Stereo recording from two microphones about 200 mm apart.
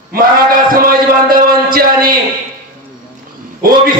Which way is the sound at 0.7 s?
45° right (ahead or behind).